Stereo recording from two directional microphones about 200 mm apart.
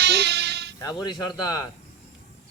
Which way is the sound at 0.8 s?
20° left (ahead or behind).